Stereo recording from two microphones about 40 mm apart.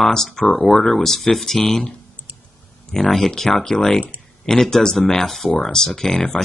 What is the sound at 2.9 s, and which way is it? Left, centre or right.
Speech, centre.